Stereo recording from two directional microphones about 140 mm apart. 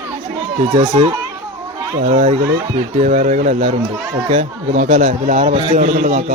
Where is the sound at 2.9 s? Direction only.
60° right (ahead or behind).